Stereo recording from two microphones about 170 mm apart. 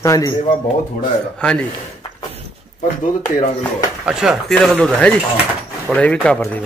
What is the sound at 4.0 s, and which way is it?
A man's voice, 5° right (ahead or behind).